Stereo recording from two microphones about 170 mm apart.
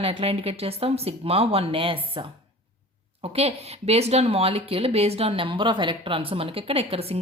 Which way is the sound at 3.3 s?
35° right (ahead or behind).